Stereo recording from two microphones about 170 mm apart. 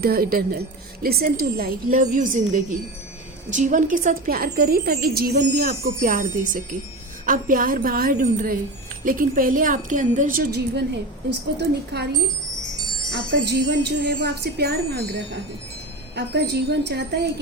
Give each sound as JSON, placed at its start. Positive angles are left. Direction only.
{"t": 0.0, "sound": "a woman's voice", "side_deg": -60}
{"t": 11.9, "sound": "speech", "side_deg": -80}